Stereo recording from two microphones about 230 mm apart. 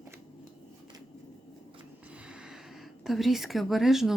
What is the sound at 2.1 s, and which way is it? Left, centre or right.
Speech, centre.